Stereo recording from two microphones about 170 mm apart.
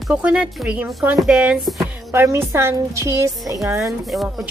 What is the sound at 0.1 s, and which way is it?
A woman's voice, 5° right (ahead or behind).